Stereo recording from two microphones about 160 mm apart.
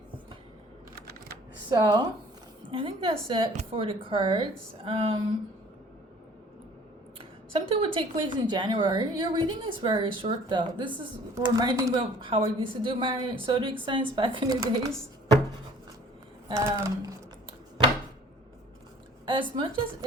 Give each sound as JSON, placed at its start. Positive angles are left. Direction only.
{"t": 1.7, "sound": "a woman's voice", "side_deg": -25}
{"t": 7.2, "sound": "speech", "side_deg": -35}
{"t": 11.3, "sound": "speech", "side_deg": -20}
{"t": 12.2, "sound": "a woman's voice", "side_deg": -35}
{"t": 16.5, "sound": "speech", "side_deg": -20}
{"t": 19.2, "sound": "a woman's voice", "side_deg": -30}